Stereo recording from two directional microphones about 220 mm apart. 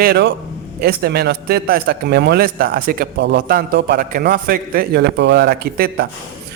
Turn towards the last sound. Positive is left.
turn(degrees=-45)  # may be behind; listen again after turning